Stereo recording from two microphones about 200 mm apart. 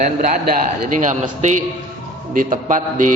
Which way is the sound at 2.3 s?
40° right (ahead or behind).